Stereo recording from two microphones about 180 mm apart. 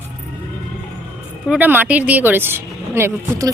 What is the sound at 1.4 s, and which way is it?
Speech, 10° right (ahead or behind).